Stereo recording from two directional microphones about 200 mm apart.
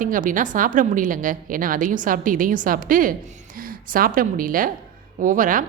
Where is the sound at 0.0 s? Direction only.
40° right (ahead or behind).